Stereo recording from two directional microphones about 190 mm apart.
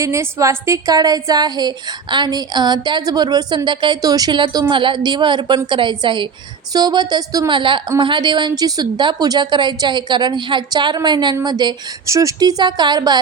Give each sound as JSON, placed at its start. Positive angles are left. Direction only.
{"t": 0.0, "sound": "a woman's voice", "side_deg": -15}